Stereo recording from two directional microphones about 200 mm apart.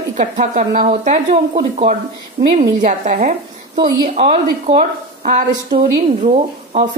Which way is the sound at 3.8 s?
20° right (ahead or behind).